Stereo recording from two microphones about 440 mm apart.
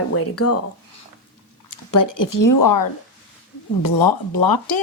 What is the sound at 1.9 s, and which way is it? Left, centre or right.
Speech, left.